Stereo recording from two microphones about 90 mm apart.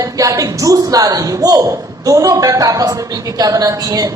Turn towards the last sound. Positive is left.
turn(degrees=-40)  # may be behind; listen again after turning